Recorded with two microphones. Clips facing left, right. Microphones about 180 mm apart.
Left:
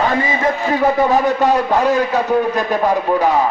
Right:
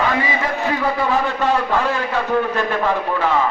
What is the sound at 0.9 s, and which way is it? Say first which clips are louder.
Music: left 5 dB; 40° left (ahead or behind).